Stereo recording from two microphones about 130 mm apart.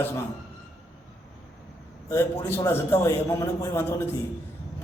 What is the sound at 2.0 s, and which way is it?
A man's voice, 20° left (ahead or behind).